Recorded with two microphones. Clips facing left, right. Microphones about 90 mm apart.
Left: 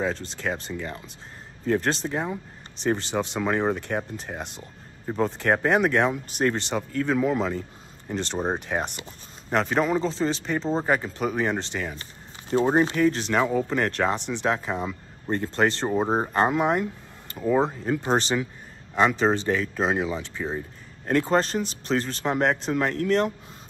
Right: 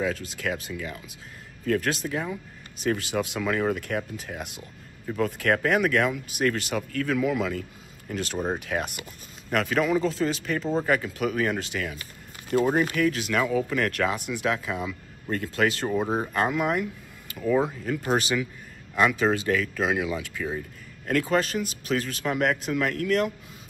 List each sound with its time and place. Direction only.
0.4 s speech: 30° left (ahead or behind)